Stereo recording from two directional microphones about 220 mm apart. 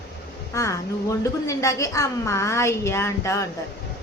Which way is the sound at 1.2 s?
15° left (ahead or behind).